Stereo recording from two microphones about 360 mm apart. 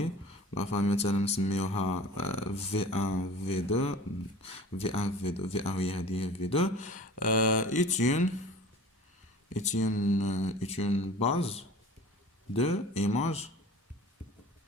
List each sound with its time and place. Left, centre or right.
0.5 s speech: centre
9.6 s speech: centre